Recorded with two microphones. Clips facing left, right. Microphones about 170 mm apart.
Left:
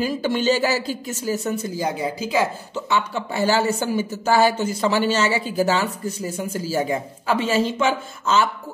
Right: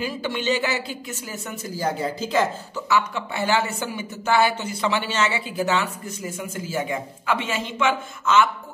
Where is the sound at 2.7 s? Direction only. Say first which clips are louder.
Even; 30° left (ahead or behind).